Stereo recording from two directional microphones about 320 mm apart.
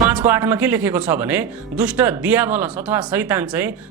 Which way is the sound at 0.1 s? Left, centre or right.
Centre.